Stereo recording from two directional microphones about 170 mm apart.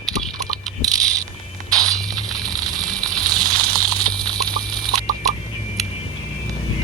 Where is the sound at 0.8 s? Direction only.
20° right (ahead or behind).